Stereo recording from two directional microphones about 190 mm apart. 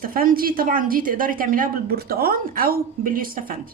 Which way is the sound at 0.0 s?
50° right (ahead or behind).